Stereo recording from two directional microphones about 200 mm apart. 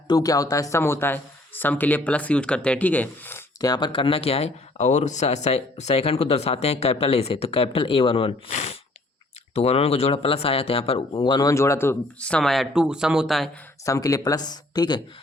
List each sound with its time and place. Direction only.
0.1 s speech: 20° left (ahead or behind); by 13.5 s centre (ahead or behind)
13.8 s speech: 15° left (ahead or behind)